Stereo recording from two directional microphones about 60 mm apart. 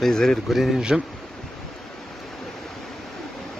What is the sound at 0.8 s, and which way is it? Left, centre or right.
Speech, centre.